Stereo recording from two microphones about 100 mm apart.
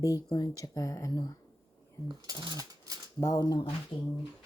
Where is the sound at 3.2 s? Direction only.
35° left (ahead or behind).